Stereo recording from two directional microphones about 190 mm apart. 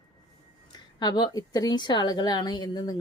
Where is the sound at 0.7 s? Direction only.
20° left (ahead or behind).